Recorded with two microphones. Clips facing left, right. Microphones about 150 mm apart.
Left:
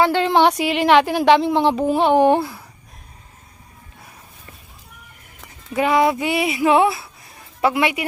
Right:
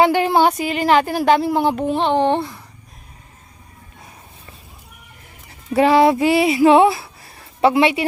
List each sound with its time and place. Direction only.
0.0 s a woman's voice: 10° right (ahead or behind); by 2.6 s 5° left (ahead or behind)
5.7 s speech: 30° right (ahead or behind)